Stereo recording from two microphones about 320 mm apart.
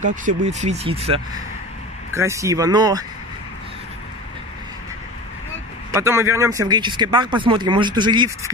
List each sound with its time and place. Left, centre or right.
0.0 s speech: right
5.9 s speech: centre